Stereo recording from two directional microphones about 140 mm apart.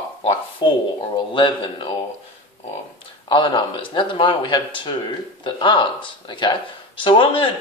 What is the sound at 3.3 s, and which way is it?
Speech, 35° left (ahead or behind).